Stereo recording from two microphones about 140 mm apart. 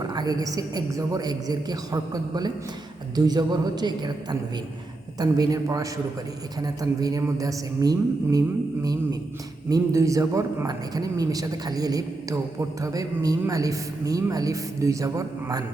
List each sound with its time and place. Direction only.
0.1 s speech: 30° right (ahead or behind)